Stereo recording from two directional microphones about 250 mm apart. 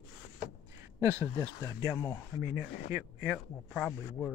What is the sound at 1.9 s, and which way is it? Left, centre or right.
Speech, centre.